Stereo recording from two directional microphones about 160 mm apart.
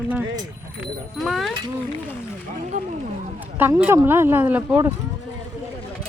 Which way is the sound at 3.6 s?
15° right (ahead or behind).